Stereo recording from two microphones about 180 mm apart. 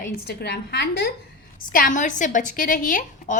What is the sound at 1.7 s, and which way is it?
A woman's voice, 45° left (ahead or behind).